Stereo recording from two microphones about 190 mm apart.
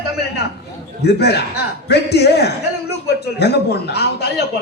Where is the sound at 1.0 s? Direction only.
60° left (ahead or behind).